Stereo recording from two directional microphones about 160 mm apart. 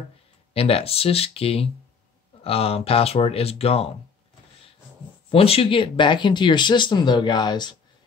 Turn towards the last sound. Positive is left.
turn(degrees=25)  # may be behind; listen again after turning